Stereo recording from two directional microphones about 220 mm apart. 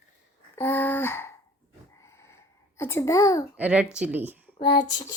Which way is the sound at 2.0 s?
15° left (ahead or behind).